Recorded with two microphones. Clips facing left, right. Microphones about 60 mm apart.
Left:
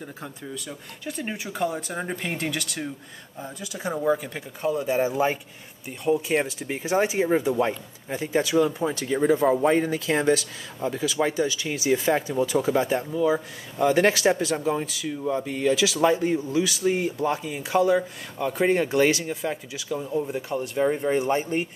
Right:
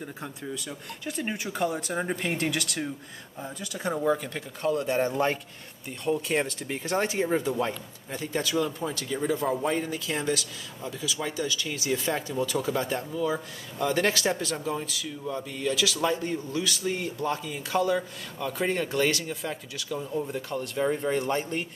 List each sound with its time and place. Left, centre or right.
0.0 s speech: centre; by 11.3 s left
11.3 s speech: centre
14.6 s speech: left